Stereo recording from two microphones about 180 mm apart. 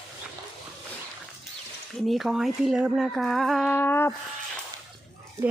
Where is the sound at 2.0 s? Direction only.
Centre (ahead or behind).